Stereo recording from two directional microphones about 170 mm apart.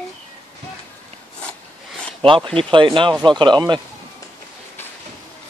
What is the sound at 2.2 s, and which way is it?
Speech, 30° right (ahead or behind).